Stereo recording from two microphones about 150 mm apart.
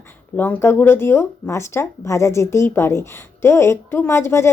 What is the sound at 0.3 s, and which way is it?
Speech, 10° left (ahead or behind).